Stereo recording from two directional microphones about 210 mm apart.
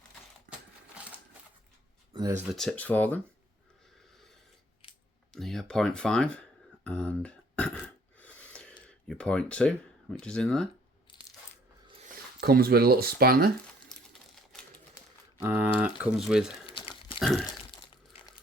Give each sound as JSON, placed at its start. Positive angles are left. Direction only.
{"t": 2.6, "sound": "speech", "side_deg": 5}
{"t": 5.3, "sound": "speech", "side_deg": 0}
{"t": 6.8, "sound": "a sound", "side_deg": 5}
{"t": 12.1, "sound": "speech", "side_deg": -45}
{"t": 13.8, "sound": "typewriter", "side_deg": 0}
{"t": 15.4, "sound": "speech", "side_deg": -10}
{"t": 16.6, "sound": "tearing", "side_deg": 25}
{"t": 17.2, "sound": "a sound", "side_deg": 0}